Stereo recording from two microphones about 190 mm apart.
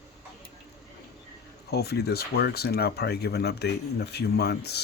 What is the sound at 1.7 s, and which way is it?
Speech, 55° left (ahead or behind).